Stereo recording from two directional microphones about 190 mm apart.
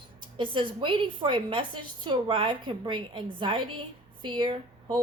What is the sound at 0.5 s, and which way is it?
A woman's voice, 25° right (ahead or behind).